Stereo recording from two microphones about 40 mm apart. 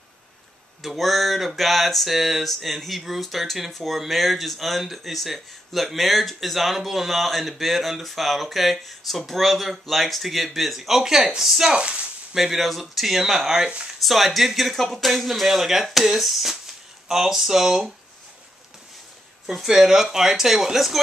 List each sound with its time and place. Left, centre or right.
0.8 s speech: centre
11.8 s speech: right
12.4 s speech: centre
19.5 s speech: centre